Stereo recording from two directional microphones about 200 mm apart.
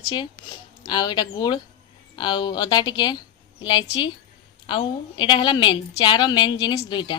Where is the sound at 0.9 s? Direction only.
20° left (ahead or behind).